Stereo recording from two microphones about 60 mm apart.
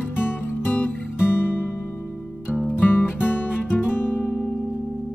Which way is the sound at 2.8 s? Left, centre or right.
Left.